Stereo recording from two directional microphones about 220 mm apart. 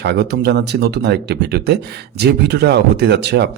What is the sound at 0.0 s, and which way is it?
Speech, 50° right (ahead or behind).